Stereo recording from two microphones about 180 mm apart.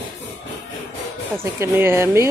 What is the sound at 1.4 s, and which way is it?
Speech, 15° right (ahead or behind).